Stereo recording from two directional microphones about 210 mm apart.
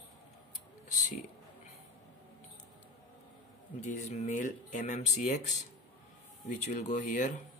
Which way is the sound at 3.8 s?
35° left (ahead or behind).